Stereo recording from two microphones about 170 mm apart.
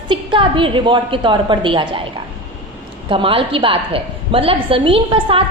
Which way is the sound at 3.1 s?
30° right (ahead or behind).